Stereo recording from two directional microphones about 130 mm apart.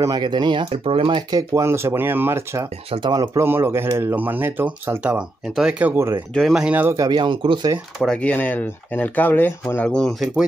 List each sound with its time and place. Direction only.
0.0 s speech: 30° right (ahead or behind)
0.7 s speech: 45° right (ahead or behind)
1.5 s speech: 20° right (ahead or behind)
2.9 s speech: 35° right (ahead or behind)
3.3 s speech: 20° right (ahead or behind)
7.0 s speech: 35° right (ahead or behind)
8.0 s speech: 10° left (ahead or behind)